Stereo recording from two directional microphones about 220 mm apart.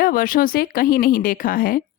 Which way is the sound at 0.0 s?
40° left (ahead or behind).